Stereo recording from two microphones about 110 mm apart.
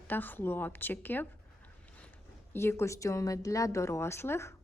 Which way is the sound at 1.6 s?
10° left (ahead or behind).